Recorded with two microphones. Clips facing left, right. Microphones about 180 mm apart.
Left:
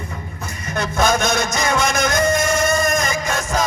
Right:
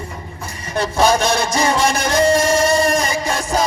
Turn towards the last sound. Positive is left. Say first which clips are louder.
# right 2 dB
turn(degrees=-30)  # may be behind; listen again after turning